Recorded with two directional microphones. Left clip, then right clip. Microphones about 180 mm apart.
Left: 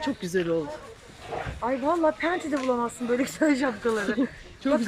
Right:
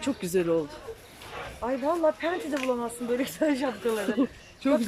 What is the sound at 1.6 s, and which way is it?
Speech, 5° right (ahead or behind).